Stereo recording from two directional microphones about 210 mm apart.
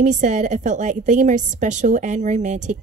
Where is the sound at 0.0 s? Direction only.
35° right (ahead or behind).